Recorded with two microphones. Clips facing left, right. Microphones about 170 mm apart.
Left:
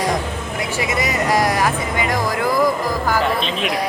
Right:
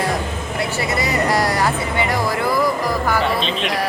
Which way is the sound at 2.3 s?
15° left (ahead or behind).